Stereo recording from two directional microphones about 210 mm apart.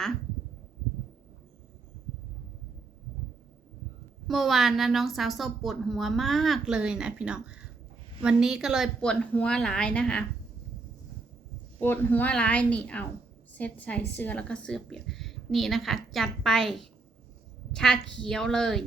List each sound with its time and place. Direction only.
4.3 s a woman's voice: centre (ahead or behind)
11.8 s a woman's voice: 10° left (ahead or behind)